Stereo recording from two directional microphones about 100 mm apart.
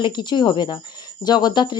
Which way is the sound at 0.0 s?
50° left (ahead or behind).